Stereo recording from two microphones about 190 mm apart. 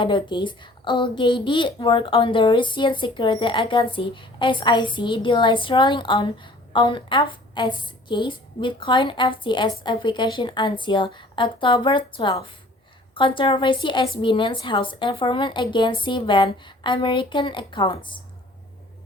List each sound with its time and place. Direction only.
0.0 s a woman's voice: 25° left (ahead or behind)